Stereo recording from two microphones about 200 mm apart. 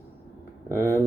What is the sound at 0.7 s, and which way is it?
Speech, 15° right (ahead or behind).